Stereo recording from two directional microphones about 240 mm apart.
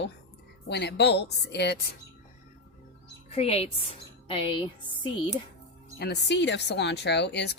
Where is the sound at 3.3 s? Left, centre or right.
Left.